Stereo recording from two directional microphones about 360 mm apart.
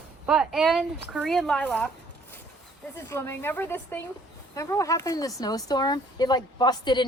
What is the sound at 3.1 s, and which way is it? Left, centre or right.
Speech, centre.